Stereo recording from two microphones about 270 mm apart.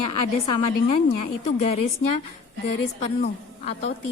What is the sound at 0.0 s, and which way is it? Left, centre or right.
A woman's voice, left.